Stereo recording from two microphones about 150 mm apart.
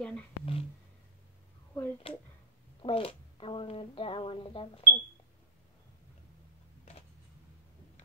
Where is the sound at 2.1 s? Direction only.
40° left (ahead or behind).